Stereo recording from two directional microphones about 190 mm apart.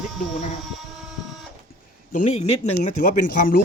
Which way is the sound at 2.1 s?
35° left (ahead or behind).